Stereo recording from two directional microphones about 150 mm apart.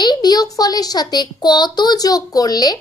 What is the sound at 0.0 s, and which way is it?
A child's voice, 30° left (ahead or behind).